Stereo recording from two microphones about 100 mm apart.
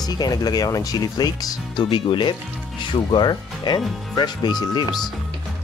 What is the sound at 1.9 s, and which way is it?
Speech, 55° left (ahead or behind).